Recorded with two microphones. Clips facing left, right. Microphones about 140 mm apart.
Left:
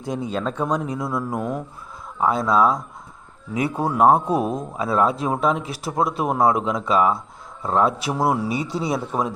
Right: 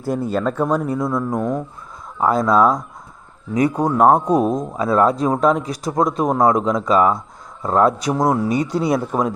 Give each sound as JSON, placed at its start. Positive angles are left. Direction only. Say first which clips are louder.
{"t": 0.0, "sound": "speech", "louder": "right 5 dB", "side_deg": -5}
{"t": 0.9, "sound": "speech", "louder": "right 5 dB", "side_deg": 5}
{"t": 4.3, "sound": "speech", "louder": "right 5 dB", "side_deg": -40}
{"t": 4.8, "sound": "speech", "louder": "right 4 dB", "side_deg": 0}